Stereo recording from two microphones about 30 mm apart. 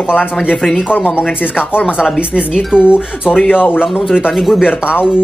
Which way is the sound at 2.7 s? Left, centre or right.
Right.